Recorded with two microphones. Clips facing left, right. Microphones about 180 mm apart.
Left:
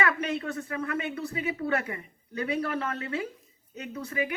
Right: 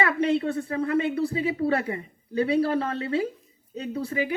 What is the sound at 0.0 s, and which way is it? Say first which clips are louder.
Speech: right 6 dB; 30° right (ahead or behind).